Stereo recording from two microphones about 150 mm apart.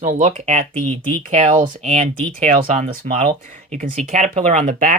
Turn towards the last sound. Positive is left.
turn(degrees=-60)  # may be behind; listen again after turning